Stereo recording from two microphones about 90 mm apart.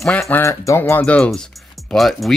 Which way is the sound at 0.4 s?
35° left (ahead or behind).